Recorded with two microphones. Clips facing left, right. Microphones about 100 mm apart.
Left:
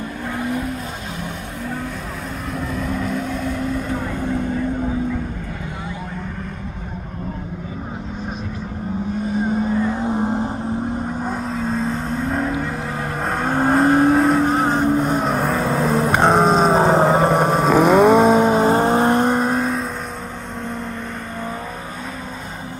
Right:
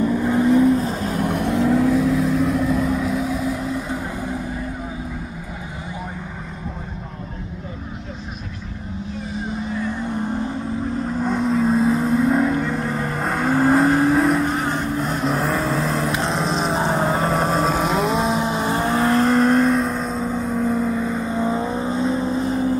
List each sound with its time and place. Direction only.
1.1 s vehicle: 55° right (ahead or behind)
1.9 s vehicle: 5° right (ahead or behind)
9.3 s vehicle: 45° left (ahead or behind)
10.1 s a sound: 30° left (ahead or behind)
11.2 s vehicle: 5° left (ahead or behind)
14.5 s vehicle: 40° left (ahead or behind)
15.3 s vehicle: centre (ahead or behind)
16.1 s a sound: 50° left (ahead or behind); by 17.4 s 25° left (ahead or behind)
17.6 s vehicle: 60° left (ahead or behind); by 19.9 s 5° left (ahead or behind)
20.2 s vehicle: 10° right (ahead or behind); by 22.5 s 30° right (ahead or behind)